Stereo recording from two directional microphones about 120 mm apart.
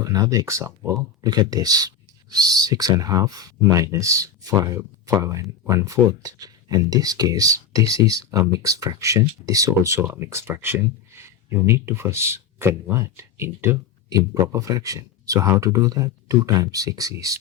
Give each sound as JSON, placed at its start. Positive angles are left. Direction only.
{"t": 0.0, "sound": "speech", "side_deg": -30}